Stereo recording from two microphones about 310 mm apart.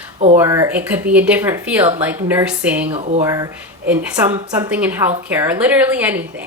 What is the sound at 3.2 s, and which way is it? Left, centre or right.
Speech, centre.